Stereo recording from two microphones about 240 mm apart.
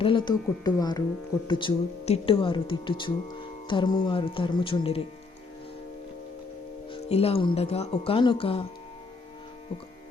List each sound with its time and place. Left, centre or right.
0.0 s a woman's voice: centre
6.9 s speech: left